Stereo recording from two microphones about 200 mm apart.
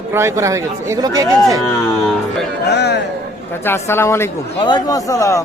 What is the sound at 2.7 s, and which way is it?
Speech, 55° left (ahead or behind).